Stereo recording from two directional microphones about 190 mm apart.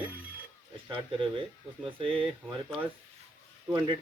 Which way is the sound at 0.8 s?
25° right (ahead or behind).